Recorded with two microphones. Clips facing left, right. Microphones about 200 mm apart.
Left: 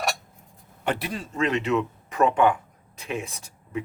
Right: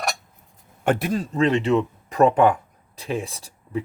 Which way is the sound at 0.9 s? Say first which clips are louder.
Right 7 dB; 45° right (ahead or behind).